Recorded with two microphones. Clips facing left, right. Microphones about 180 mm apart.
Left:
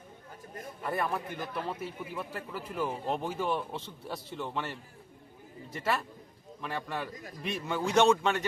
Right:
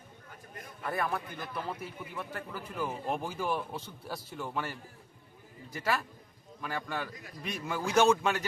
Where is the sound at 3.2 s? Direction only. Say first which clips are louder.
Left 2 dB; centre (ahead or behind).